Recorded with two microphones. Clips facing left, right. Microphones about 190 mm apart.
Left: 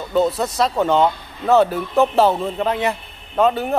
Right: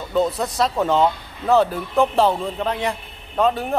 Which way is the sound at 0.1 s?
Centre (ahead or behind).